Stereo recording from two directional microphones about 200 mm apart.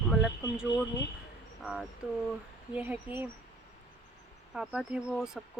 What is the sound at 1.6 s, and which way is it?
Speech, centre (ahead or behind).